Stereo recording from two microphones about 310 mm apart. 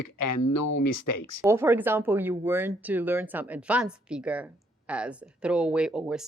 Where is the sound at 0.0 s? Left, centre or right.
Left.